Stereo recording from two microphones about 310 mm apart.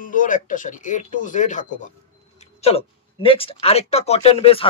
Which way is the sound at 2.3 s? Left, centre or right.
Centre.